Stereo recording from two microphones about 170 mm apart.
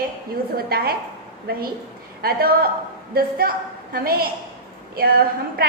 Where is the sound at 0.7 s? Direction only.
65° right (ahead or behind).